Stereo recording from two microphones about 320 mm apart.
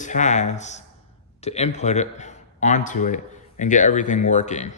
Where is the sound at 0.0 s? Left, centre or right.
Left.